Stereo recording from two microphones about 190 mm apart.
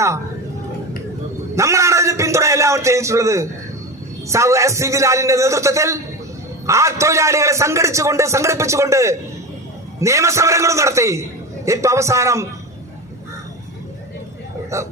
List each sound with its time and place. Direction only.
1.5 s a sound: 15° right (ahead or behind)
4.3 s a man's voice: 15° right (ahead or behind)
14.7 s a man's voice: 15° right (ahead or behind)